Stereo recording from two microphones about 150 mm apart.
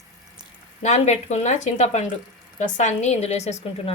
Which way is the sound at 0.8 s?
50° left (ahead or behind).